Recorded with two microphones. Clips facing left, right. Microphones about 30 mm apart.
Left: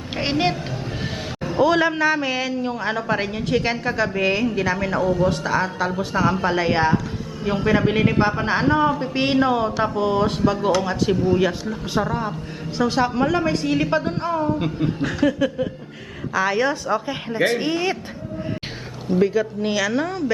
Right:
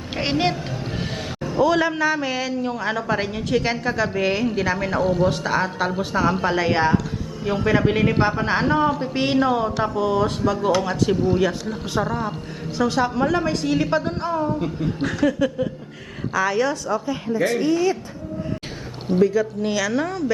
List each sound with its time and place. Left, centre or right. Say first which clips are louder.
0.2 s a woman's voice: even; centre
1.5 s a man's voice: left 1 dB; centre
9.1 s a man's voice: left 1 dB; centre
10.7 s a woman's voice: right 2 dB; centre
12.0 s a woman's voice: left 1 dB; centre
16.3 s a woman's voice: left 1 dB; centre
16.9 s a woman's voice: even; left
19.2 s a man's voice: right 1 dB; left